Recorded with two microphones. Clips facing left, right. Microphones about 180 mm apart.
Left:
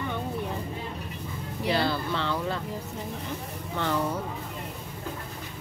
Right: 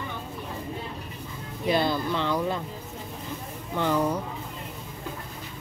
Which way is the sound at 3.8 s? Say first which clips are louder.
Right 3 dB; 10° right (ahead or behind).